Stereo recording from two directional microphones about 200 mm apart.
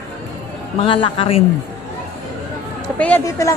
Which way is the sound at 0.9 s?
25° left (ahead or behind).